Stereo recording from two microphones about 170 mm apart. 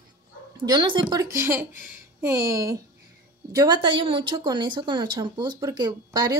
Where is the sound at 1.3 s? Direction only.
15° right (ahead or behind).